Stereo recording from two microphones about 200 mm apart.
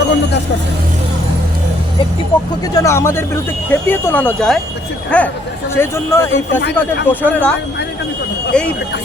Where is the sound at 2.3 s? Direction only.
20° left (ahead or behind).